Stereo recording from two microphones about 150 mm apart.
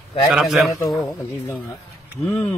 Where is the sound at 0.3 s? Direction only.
Centre (ahead or behind).